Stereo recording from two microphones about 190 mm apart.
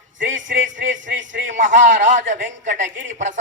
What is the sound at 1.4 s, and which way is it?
A man's voice, 40° right (ahead or behind).